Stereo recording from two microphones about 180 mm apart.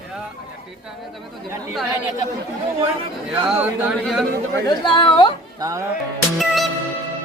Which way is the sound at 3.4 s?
5° right (ahead or behind).